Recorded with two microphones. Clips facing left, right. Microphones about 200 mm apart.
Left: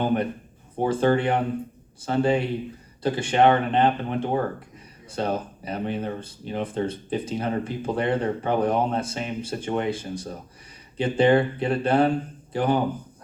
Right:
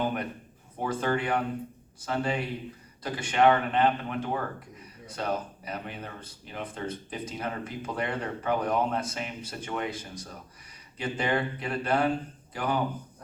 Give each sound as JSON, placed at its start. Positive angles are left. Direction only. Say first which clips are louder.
{"t": 0.0, "sound": "a man's voice", "louder": "left 7 dB", "side_deg": 30}